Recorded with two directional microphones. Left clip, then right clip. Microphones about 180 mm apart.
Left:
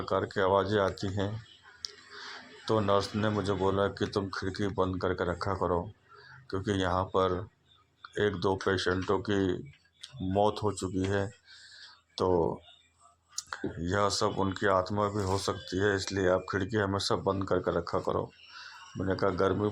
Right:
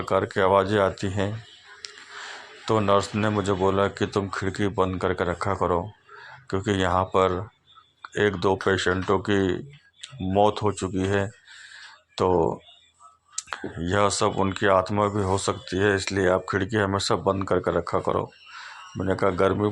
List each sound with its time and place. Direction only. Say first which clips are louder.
0.0 s speech: right 7 dB; 20° right (ahead or behind)
1.8 s a sound: right 4 dB; 20° right (ahead or behind)
2.6 s speech: right 6 dB; 20° right (ahead or behind)
13.8 s speech: right 7 dB; 20° right (ahead or behind)